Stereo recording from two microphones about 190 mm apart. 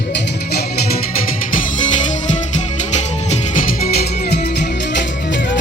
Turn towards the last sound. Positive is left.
turn(degrees=40)  # may be behind; listen again after turning